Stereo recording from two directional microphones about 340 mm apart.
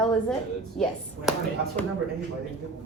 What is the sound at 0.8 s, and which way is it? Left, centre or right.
Speech, centre.